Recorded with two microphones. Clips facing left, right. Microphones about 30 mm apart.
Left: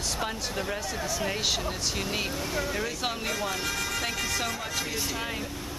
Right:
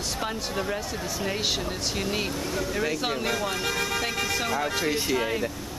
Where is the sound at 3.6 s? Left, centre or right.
Right.